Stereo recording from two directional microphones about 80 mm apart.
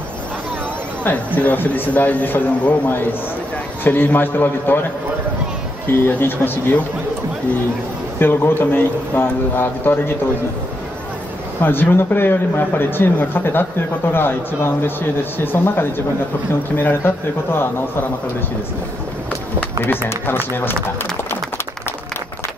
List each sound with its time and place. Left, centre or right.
1.0 s speech: centre
5.9 s speech: left
8.2 s speech: left
11.6 s speech: left
19.8 s speech: left